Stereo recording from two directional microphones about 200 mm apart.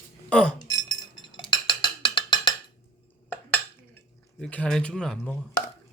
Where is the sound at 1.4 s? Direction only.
25° left (ahead or behind).